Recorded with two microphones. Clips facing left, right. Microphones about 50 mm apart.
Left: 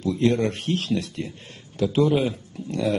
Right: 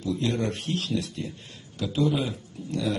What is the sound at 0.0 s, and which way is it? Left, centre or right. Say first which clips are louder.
A man's voice: left 6 dB; left.